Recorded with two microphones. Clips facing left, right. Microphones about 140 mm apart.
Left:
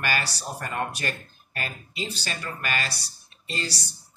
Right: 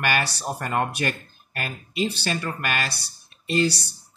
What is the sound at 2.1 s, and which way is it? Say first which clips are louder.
Speech: right 6 dB; 60° right (ahead or behind).